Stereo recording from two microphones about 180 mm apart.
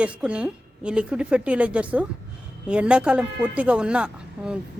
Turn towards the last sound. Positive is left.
turn(degrees=-5)  # may be behind; listen again after turning